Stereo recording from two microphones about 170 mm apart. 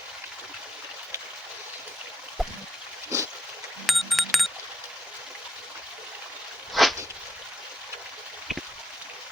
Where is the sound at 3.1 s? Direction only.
20° right (ahead or behind).